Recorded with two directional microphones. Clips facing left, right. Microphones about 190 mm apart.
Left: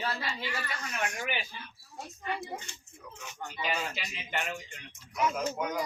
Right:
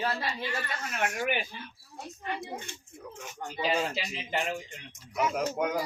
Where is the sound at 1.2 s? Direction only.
55° right (ahead or behind).